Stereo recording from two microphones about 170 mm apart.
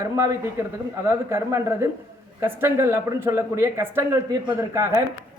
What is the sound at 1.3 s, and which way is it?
Speech, 15° right (ahead or behind).